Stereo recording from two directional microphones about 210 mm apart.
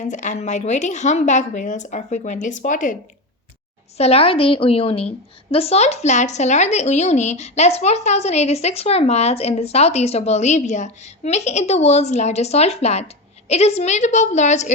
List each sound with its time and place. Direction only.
0.0 s a woman's voice: 35° left (ahead or behind)